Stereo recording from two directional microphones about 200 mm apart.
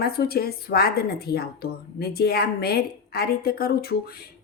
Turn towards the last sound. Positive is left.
turn(degrees=50)  # may be behind; listen again after turning